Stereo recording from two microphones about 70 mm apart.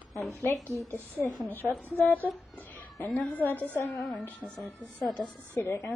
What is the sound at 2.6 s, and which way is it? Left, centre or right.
Cat, left.